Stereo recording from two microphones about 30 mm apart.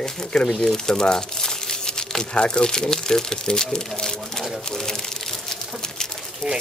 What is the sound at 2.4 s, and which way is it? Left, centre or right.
Speech, left.